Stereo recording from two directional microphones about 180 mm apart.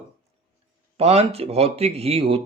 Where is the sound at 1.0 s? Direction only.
35° right (ahead or behind).